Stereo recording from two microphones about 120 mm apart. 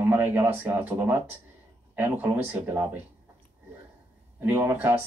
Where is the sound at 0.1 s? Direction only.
15° right (ahead or behind).